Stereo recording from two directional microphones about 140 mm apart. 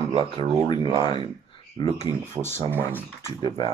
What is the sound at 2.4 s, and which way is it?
Speech, 20° right (ahead or behind).